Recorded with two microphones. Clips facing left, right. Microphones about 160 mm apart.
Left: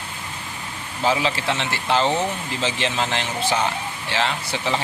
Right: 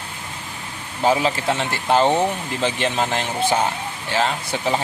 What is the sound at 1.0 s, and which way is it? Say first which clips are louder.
Speech: right 3 dB; 45° right (ahead or behind).